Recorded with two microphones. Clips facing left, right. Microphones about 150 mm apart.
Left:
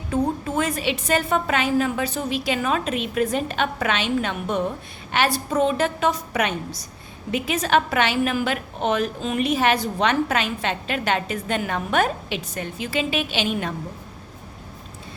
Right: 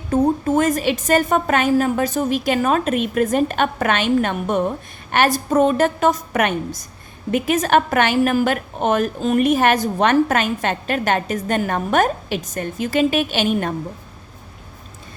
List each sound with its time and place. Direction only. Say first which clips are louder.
0.1 s a woman's voice: right 6 dB; 45° right (ahead or behind)